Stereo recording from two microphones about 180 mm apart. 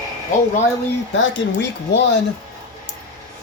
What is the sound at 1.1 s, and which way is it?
Speech, 85° left.